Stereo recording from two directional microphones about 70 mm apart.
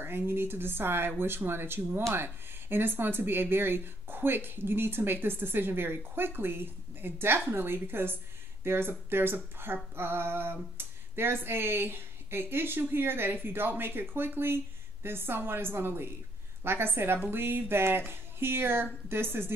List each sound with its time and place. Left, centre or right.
0.0 s speech: right